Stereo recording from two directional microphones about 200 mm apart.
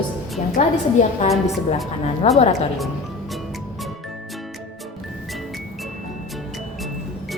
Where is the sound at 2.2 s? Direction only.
30° left (ahead or behind).